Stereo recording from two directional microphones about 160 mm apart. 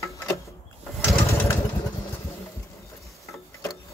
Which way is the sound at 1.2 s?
15° left (ahead or behind).